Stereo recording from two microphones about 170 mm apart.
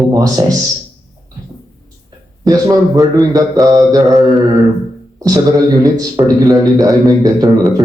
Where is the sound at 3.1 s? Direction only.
20° right (ahead or behind).